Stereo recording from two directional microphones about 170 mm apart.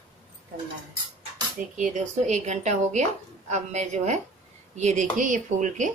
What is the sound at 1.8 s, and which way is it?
Speech, 45° right (ahead or behind).